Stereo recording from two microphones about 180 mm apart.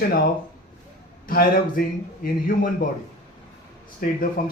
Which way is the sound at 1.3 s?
50° left (ahead or behind).